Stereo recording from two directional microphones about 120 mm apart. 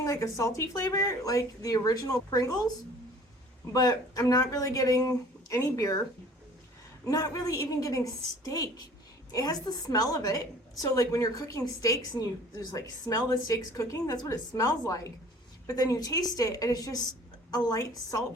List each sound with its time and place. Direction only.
0.0 s a woman's voice: 25° left (ahead or behind)
7.0 s a woman's voice: 30° left (ahead or behind)